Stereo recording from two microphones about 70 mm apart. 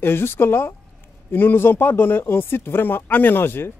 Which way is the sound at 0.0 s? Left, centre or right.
Left.